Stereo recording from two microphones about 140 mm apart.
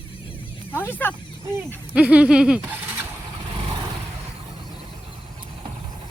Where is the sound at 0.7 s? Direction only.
15° left (ahead or behind).